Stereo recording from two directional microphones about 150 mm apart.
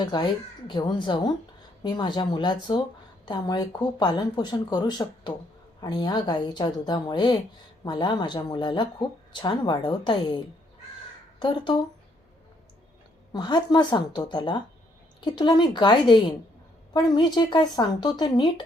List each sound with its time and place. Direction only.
0.0 s speech: 30° left (ahead or behind)
13.3 s speech: 30° left (ahead or behind)